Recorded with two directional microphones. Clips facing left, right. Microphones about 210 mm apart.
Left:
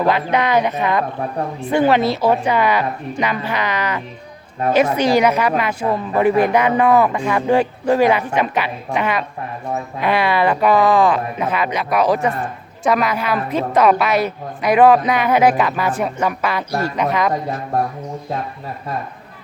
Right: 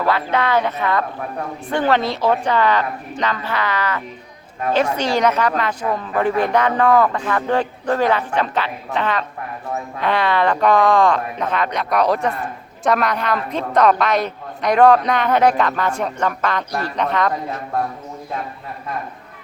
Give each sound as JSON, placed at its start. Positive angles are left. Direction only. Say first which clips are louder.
{"t": 0.0, "sound": "a woman's voice", "louder": "left 2 dB", "side_deg": 15}